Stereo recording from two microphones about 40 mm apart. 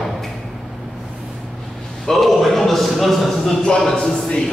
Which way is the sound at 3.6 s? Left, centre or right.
Centre.